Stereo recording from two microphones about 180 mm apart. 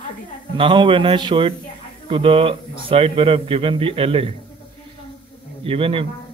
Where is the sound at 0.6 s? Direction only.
25° right (ahead or behind).